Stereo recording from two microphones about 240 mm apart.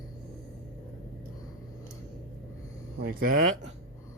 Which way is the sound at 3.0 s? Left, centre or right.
Right.